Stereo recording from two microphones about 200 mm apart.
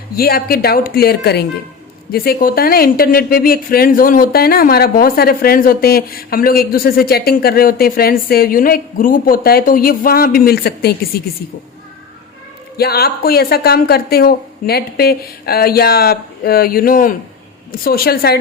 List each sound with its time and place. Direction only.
0.2 s speech: 50° left (ahead or behind)
12.7 s speech: 50° left (ahead or behind)